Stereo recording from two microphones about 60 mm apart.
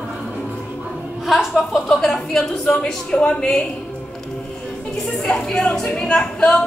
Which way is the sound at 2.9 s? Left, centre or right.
Centre.